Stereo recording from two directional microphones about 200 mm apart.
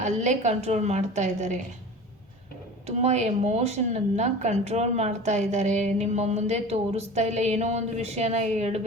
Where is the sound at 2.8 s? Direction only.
35° right (ahead or behind).